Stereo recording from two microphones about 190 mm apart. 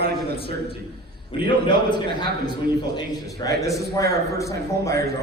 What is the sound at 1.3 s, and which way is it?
A man's voice, 25° left (ahead or behind).